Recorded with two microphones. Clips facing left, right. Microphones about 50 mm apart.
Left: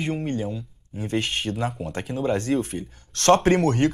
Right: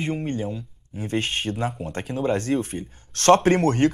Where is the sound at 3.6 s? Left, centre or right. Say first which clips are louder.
Right 1 dB; right.